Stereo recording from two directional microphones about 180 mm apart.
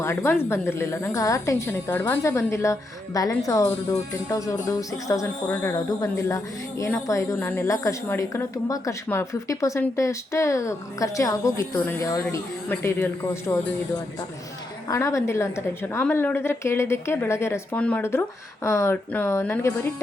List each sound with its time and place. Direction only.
0.0 s a woman's voice: 15° left (ahead or behind)